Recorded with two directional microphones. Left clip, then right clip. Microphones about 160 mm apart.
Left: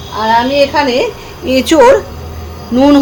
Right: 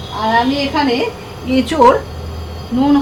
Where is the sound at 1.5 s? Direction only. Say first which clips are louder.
Left 5 dB; 85° left.